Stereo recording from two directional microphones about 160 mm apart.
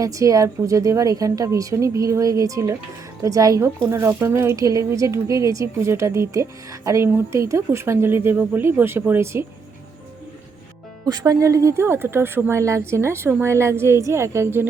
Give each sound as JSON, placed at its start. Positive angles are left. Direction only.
{"t": 0.0, "sound": "a woman's voice", "side_deg": -20}
{"t": 11.0, "sound": "a woman's voice", "side_deg": -25}